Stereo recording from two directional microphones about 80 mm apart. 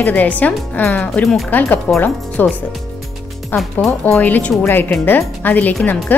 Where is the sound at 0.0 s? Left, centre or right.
Centre.